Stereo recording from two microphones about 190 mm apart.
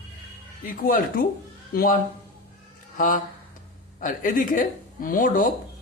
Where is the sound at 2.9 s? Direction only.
45° left (ahead or behind).